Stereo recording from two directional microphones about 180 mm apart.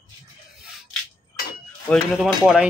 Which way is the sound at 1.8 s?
Centre (ahead or behind).